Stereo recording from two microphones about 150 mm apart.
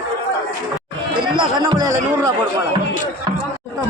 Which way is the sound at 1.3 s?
30° right (ahead or behind).